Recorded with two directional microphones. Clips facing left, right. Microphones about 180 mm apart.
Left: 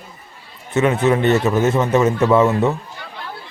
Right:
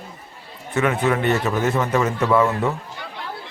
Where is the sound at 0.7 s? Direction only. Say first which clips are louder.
Left 4 dB; 25° left (ahead or behind).